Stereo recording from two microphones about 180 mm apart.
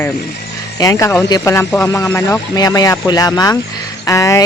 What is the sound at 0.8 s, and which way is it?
Speech, 20° left (ahead or behind).